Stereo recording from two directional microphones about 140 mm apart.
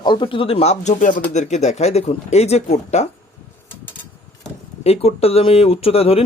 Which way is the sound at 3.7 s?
15° left (ahead or behind).